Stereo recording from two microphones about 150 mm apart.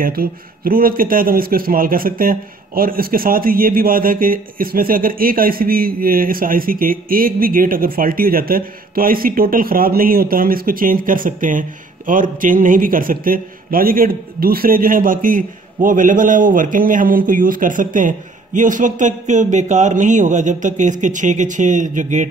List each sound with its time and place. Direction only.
0.0 s a man's voice: 80° right; by 22.3 s 55° right (ahead or behind)